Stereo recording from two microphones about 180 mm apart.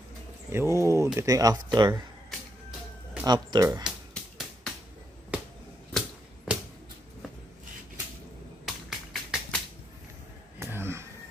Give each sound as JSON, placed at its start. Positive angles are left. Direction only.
{"t": 0.5, "sound": "speech", "side_deg": -15}
{"t": 3.3, "sound": "speech", "side_deg": -25}
{"t": 3.8, "sound": "music", "side_deg": 0}
{"t": 5.9, "sound": "a sound", "side_deg": -5}
{"t": 8.6, "sound": "tap", "side_deg": 0}
{"t": 10.6, "sound": "a sound", "side_deg": -15}